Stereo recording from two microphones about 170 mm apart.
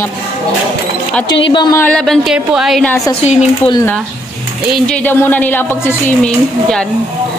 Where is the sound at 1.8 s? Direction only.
5° left (ahead or behind).